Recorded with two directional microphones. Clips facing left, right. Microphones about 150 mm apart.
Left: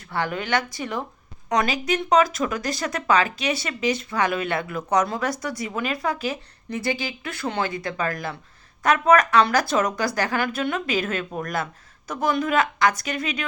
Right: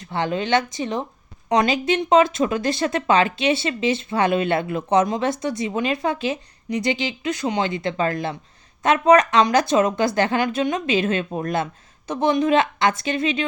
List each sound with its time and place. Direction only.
0.0 s speech: 20° right (ahead or behind)